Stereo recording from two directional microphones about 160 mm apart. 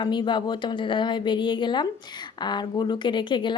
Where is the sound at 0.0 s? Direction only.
30° left (ahead or behind).